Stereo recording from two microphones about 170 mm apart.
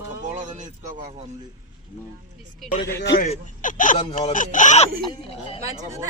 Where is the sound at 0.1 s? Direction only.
45° right (ahead or behind).